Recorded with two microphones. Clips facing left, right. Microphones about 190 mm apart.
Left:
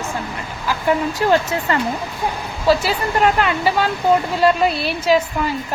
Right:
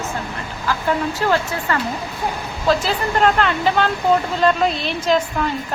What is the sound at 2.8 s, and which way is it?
A woman's voice, 10° left (ahead or behind).